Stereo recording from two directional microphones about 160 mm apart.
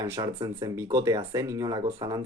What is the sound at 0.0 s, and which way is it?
Speech, 25° right (ahead or behind).